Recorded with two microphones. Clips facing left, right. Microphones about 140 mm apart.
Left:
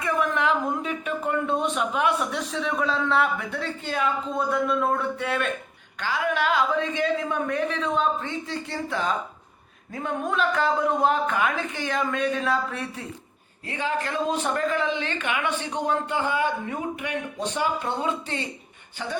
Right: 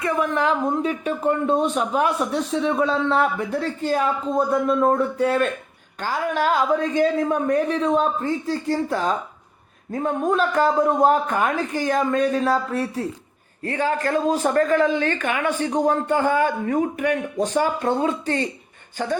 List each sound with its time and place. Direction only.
0.0 s a woman's voice: 30° right (ahead or behind)